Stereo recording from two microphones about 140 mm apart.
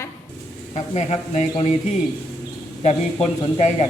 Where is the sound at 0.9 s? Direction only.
50° left (ahead or behind).